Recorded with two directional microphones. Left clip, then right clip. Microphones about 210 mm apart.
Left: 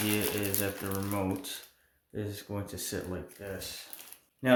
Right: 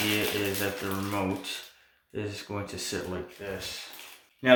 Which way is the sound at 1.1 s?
25° left (ahead or behind).